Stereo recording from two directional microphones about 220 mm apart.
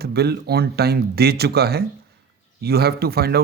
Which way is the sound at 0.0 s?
45° right (ahead or behind).